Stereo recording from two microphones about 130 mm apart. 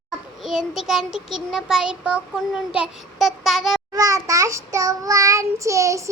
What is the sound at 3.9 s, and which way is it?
Child singing, 25° right (ahead or behind).